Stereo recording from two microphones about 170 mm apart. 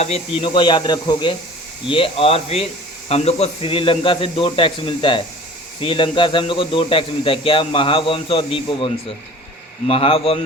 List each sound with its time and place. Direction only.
0.0 s a man's voice: 35° left (ahead or behind)